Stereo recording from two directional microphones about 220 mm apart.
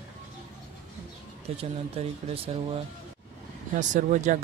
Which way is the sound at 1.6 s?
30° right (ahead or behind).